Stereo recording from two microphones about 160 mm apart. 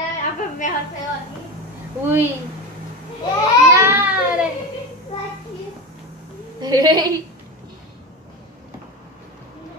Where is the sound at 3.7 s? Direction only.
15° right (ahead or behind).